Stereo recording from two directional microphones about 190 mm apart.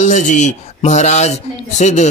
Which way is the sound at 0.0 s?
40° left (ahead or behind).